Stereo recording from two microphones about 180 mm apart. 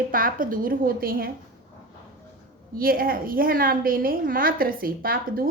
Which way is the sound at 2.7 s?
55° right (ahead or behind).